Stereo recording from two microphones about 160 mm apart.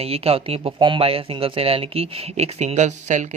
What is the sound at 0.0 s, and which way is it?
Speech, 40° right (ahead or behind).